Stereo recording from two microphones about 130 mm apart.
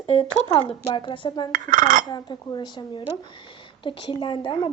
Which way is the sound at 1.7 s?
90° right.